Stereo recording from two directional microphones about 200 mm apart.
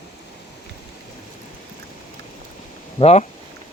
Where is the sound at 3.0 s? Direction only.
30° left (ahead or behind).